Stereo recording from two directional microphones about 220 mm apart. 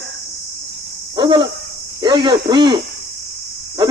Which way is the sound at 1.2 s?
20° right (ahead or behind).